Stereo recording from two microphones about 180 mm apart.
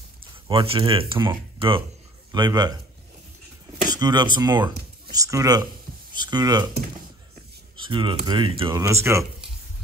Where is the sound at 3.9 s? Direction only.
20° right (ahead or behind).